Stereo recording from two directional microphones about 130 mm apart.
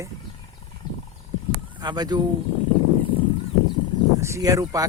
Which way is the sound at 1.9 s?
35° right (ahead or behind).